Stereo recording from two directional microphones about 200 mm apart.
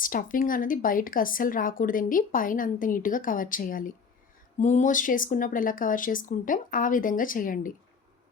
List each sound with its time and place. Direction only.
0.0 s a woman's voice: 45° left (ahead or behind)